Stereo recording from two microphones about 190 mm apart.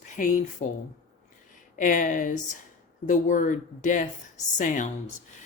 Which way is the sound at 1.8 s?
45° left (ahead or behind).